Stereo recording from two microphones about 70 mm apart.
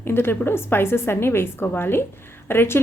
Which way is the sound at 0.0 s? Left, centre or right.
Left.